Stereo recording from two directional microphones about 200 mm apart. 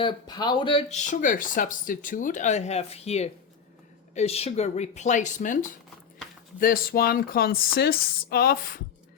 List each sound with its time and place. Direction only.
0.0 s speech: 20° left (ahead or behind); by 5.5 s 40° left (ahead or behind)
6.6 s speech: 45° left (ahead or behind)